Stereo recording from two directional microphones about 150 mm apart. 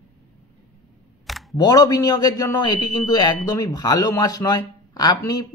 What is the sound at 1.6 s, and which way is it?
Speech, 25° left (ahead or behind).